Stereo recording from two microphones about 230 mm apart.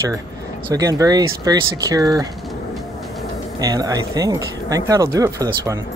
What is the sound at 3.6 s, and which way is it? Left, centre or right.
Speech, centre.